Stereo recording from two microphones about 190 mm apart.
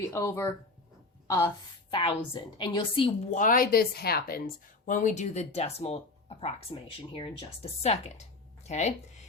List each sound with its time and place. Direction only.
0.1 s speech: 10° left (ahead or behind)
1.9 s a woman's voice: 25° left (ahead or behind)
3.3 s speech: 45° left (ahead or behind)